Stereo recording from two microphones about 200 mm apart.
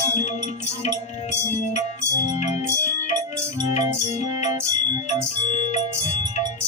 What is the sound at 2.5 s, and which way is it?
Music, 35° left (ahead or behind).